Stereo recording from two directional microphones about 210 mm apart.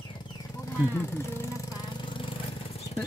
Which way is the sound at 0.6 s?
15° left (ahead or behind).